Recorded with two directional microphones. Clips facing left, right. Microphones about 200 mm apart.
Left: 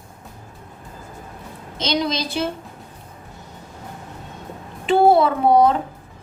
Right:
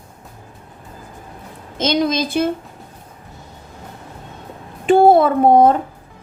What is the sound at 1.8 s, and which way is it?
Speech, 50° right (ahead or behind).